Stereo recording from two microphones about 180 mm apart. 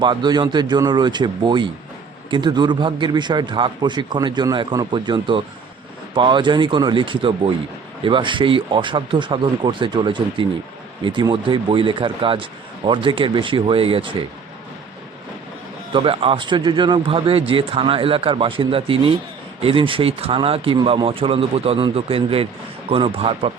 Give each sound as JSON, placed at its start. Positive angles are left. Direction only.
{"t": 0.0, "sound": "speech", "side_deg": -25}
{"t": 15.9, "sound": "speech", "side_deg": -30}